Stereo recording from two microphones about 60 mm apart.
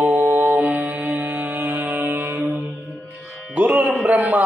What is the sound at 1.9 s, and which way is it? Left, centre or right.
Music, right.